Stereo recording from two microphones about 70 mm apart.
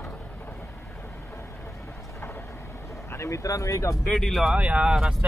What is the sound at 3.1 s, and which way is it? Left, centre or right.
Speech, left.